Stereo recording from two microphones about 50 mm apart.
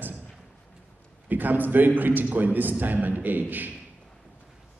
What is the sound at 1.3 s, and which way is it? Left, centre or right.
A man's voice, right.